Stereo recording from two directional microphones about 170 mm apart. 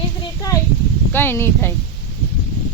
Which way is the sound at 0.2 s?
20° left (ahead or behind).